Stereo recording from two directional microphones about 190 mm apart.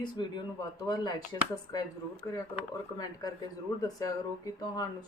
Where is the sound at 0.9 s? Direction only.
20° left (ahead or behind).